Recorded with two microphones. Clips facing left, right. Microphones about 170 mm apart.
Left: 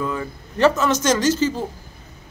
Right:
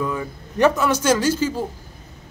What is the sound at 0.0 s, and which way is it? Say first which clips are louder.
A man's voice: even; 10° right (ahead or behind).